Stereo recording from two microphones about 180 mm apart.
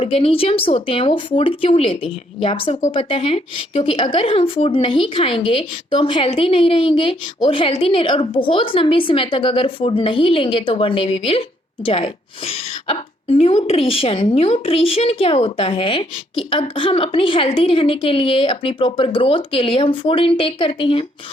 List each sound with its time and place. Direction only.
0.0 s speech: 30° left (ahead or behind)